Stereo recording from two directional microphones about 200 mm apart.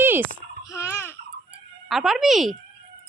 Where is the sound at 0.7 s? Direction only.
15° left (ahead or behind).